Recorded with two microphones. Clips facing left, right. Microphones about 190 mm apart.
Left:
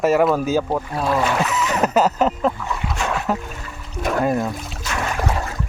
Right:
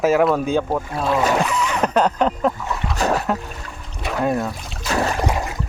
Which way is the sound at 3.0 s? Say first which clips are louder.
Right 5 dB; 40° right (ahead or behind).